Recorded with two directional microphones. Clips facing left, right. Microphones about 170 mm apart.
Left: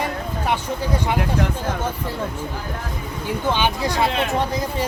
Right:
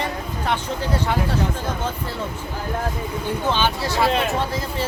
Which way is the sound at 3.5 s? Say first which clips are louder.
Left 2 dB; 15° left (ahead or behind).